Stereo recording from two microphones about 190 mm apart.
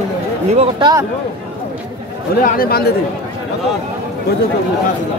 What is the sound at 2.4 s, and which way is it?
Speech, 50° left (ahead or behind).